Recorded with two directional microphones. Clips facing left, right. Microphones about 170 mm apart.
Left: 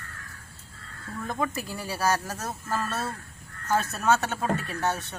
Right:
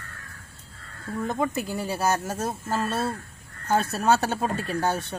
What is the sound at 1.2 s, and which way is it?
Speech, 25° right (ahead or behind).